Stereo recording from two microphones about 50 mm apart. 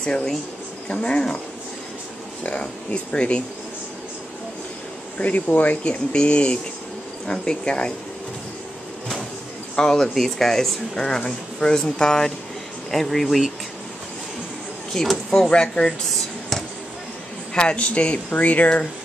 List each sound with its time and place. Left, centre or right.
0.0 s speech: centre
2.4 s speech: left
5.2 s speech: left
9.8 s speech: centre
14.9 s speech: centre
17.6 s speech: left